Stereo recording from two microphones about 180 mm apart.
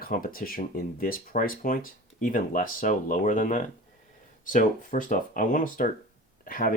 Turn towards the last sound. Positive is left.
turn(degrees=50)  # may be behind; listen again after turning